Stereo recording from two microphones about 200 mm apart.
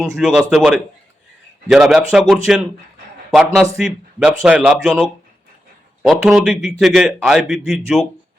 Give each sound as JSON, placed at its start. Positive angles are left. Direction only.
{"t": 0.0, "sound": "a man's voice", "side_deg": 0}